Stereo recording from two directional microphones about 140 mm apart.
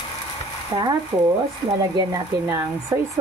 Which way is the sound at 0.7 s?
30° right (ahead or behind).